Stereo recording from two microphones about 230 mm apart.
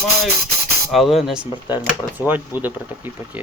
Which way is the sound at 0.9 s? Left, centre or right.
Centre.